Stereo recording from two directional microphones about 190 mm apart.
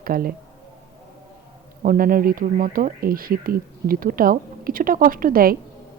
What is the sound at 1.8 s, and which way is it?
Speech, 45° right (ahead or behind).